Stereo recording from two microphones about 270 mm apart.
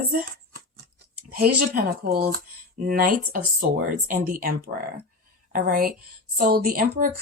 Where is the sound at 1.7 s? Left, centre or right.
Right.